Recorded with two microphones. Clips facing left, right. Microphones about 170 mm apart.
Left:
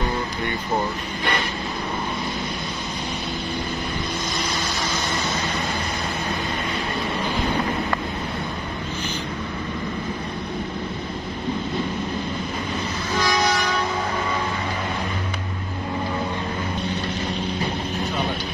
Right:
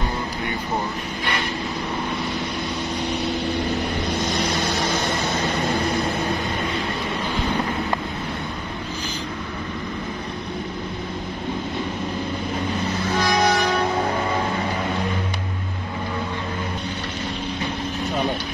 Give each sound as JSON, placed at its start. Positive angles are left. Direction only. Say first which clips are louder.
{"t": 4.5, "sound": "vehicle", "louder": "right 4 dB", "side_deg": -60}
{"t": 13.2, "sound": "vehicle", "louder": "right 2 dB", "side_deg": -55}